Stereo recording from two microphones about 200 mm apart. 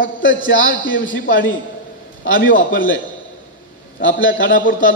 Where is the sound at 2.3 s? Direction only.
45° left (ahead or behind).